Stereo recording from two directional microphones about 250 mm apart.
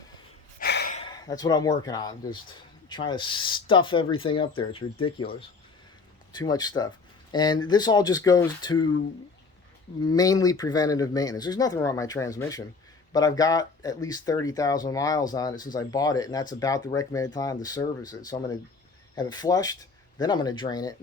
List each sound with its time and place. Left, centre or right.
0.6 s gasp: left
0.9 s speech: centre
10.0 s speech: centre